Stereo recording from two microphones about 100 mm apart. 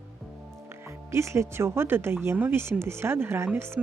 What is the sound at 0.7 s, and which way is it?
Speech, 30° right (ahead or behind).